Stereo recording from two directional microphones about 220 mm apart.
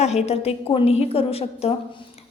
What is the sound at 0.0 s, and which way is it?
A woman's voice, 30° left (ahead or behind).